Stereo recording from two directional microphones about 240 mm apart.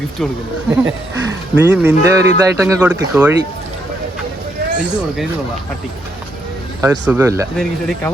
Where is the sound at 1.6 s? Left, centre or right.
Centre.